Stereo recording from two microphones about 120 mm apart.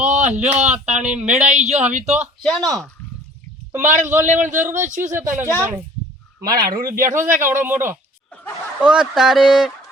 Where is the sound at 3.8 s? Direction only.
85° right.